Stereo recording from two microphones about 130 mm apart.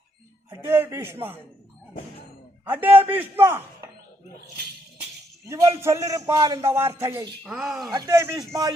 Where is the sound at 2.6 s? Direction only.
15° right (ahead or behind).